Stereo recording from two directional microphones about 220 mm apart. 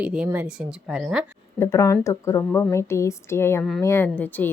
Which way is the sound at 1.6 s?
15° left (ahead or behind).